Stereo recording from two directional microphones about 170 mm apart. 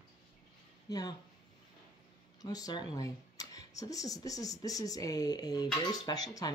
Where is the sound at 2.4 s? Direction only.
20° left (ahead or behind).